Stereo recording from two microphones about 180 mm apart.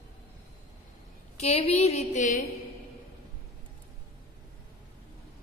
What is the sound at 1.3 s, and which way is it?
A woman's voice, 35° left (ahead or behind).